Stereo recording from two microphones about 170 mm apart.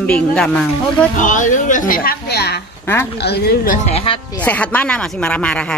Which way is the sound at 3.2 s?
70° left (ahead or behind).